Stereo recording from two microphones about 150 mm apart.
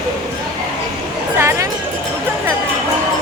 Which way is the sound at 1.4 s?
20° right (ahead or behind).